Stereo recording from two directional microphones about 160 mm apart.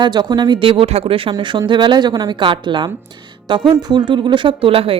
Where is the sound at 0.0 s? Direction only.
25° right (ahead or behind).